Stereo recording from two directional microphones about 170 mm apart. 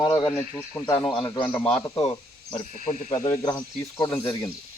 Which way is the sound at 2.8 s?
50° left (ahead or behind).